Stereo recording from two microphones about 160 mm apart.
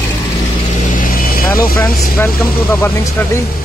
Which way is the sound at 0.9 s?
60° left (ahead or behind).